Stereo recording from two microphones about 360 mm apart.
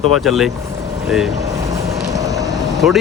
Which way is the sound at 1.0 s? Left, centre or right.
Centre.